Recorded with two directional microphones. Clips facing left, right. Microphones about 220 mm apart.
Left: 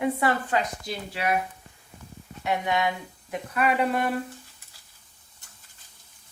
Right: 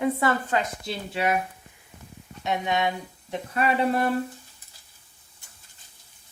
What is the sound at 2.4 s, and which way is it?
Speech, 20° right (ahead or behind).